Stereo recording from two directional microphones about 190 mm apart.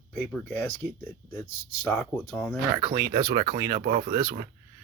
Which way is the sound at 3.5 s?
45° right (ahead or behind).